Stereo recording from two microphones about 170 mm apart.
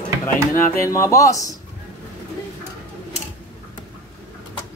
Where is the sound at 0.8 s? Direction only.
20° left (ahead or behind).